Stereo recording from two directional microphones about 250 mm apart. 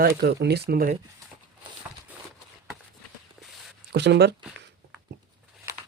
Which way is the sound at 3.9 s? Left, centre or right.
Right.